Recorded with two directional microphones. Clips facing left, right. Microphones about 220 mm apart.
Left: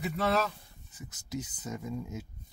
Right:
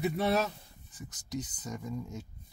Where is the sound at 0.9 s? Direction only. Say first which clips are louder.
Even; 5° left (ahead or behind).